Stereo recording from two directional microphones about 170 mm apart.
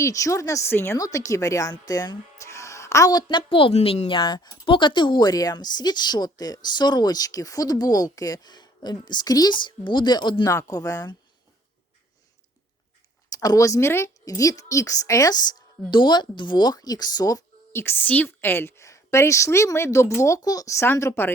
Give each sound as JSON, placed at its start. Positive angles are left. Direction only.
{"t": 0.0, "sound": "a woman's voice", "side_deg": 20}
{"t": 13.3, "sound": "a woman's voice", "side_deg": 20}